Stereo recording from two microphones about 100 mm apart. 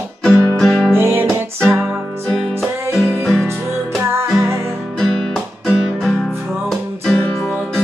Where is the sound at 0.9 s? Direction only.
25° right (ahead or behind).